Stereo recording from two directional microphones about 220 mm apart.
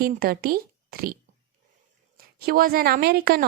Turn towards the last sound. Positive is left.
turn(degrees=-45)  # may be behind; listen again after turning